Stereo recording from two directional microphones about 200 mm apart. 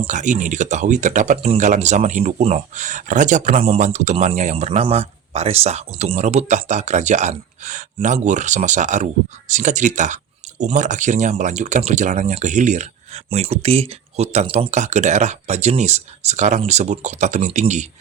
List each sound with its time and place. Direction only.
0.0 s speech: 35° right (ahead or behind)